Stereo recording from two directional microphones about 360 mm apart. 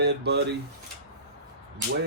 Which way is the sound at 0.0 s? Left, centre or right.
Right.